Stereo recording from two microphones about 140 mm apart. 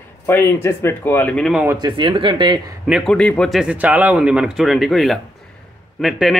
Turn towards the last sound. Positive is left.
turn(degrees=0)  # may be behind; listen again after turning